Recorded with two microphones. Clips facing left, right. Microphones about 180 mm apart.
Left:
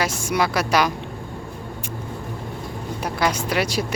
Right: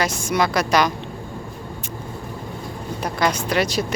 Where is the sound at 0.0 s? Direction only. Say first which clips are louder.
Right 1 dB; 10° left (ahead or behind).